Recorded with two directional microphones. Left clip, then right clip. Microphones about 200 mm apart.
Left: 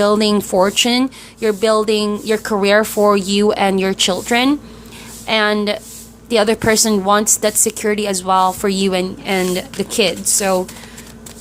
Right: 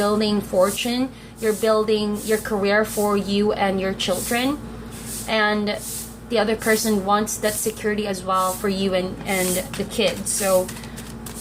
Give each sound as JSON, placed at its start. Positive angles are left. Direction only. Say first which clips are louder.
{"t": 0.0, "sound": "speech", "louder": "left 7 dB", "side_deg": 50}